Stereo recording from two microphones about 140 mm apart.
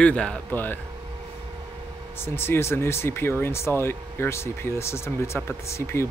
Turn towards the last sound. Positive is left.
turn(degrees=20)  # may be behind; listen again after turning